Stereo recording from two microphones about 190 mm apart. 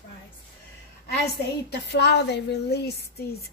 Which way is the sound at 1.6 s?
60° left (ahead or behind).